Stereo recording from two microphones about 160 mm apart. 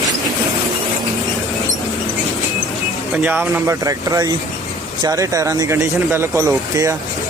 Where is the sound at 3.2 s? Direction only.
15° right (ahead or behind).